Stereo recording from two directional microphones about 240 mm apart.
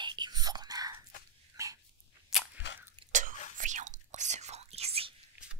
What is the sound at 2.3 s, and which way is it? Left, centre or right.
Biting, centre.